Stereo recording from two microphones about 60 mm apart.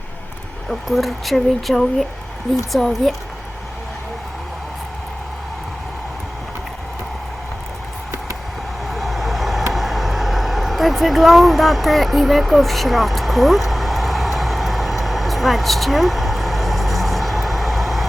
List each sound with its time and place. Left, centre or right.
0.7 s speech: centre
8.9 s vehicle: centre